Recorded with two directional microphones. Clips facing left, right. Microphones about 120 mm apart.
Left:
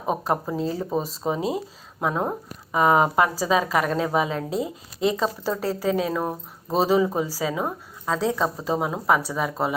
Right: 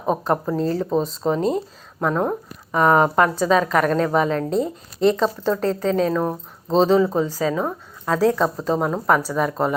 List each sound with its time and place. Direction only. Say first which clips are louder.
0.1 s a woman's voice: right 4 dB; 5° left (ahead or behind)
8.0 s a woman's voice: right 5 dB; centre (ahead or behind)